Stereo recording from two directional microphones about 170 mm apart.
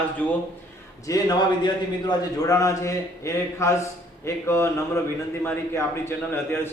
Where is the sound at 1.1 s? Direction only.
20° left (ahead or behind).